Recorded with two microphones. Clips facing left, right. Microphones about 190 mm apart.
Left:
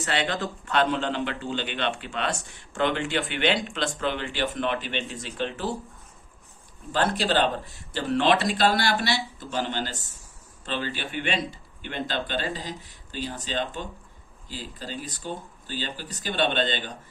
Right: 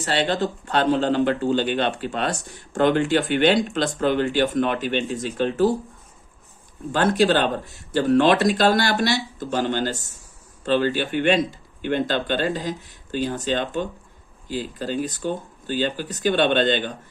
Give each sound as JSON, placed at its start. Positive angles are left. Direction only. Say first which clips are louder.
{"t": 0.0, "sound": "a man's voice", "louder": "right 5 dB", "side_deg": -35}
{"t": 6.9, "sound": "speech", "louder": "right 5 dB", "side_deg": -50}